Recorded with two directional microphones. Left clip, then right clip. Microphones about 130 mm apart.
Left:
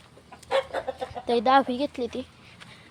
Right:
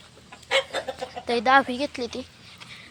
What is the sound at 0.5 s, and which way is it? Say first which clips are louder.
Chicken: right 2 dB; 60° left (ahead or behind).